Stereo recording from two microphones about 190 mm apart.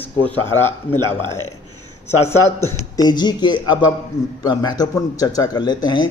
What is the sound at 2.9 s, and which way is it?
Speech, 20° left (ahead or behind).